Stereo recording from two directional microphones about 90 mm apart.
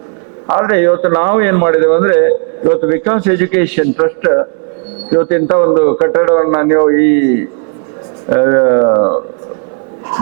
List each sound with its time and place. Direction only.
0.4 s a man's voice: 15° right (ahead or behind)